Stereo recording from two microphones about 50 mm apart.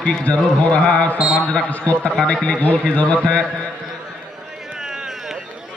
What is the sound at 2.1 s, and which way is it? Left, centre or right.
Speech, centre.